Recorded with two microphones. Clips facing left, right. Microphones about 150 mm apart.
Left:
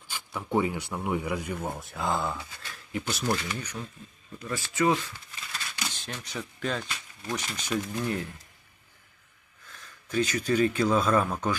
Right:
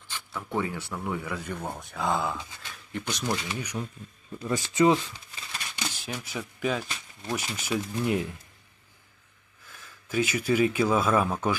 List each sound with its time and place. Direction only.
0.1 s speech: 15° left (ahead or behind)
2.6 s a sound: centre (ahead or behind)
3.3 s speech: 15° right (ahead or behind)
5.9 s speech: 10° right (ahead or behind)
9.7 s speech: 10° right (ahead or behind)